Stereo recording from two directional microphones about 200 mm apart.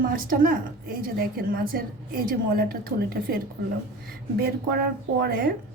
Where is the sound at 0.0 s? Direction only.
45° right (ahead or behind).